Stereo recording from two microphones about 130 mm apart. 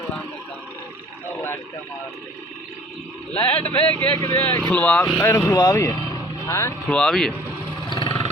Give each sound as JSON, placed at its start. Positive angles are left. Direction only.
{"t": 3.4, "sound": "speech", "side_deg": 10}
{"t": 6.8, "sound": "speech", "side_deg": 5}
{"t": 7.9, "sound": "roar", "side_deg": 35}